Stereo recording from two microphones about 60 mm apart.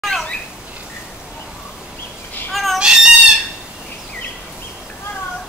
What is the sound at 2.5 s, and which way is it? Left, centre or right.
Fowl, centre.